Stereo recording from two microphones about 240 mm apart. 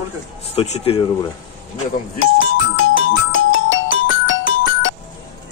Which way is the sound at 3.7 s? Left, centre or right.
Left.